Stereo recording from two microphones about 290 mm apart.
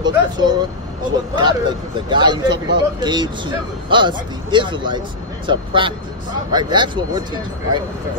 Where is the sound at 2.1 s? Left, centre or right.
Centre.